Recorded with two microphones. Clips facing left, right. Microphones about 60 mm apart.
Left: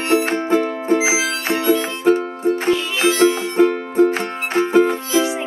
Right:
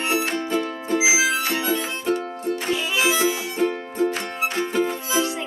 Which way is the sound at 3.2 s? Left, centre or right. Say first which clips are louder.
Left 8 dB; left.